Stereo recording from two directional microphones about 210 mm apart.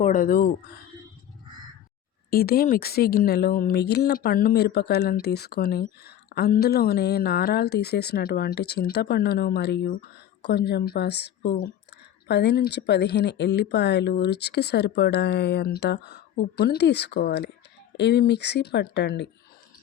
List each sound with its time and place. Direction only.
0.0 s a woman's voice: 40° left (ahead or behind)
2.3 s a woman's voice: 45° left (ahead or behind)